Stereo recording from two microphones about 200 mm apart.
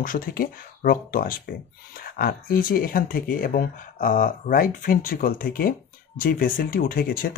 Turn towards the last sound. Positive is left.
turn(degrees=45)  # may be behind; listen again after turning